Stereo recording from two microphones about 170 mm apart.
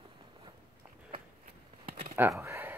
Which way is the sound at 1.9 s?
35° right (ahead or behind).